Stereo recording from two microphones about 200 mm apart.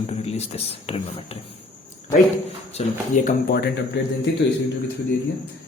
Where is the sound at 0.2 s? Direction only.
30° left (ahead or behind).